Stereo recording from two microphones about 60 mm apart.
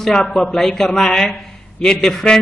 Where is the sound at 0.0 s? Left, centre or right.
Centre.